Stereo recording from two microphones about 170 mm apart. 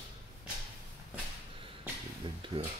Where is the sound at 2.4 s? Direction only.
30° right (ahead or behind).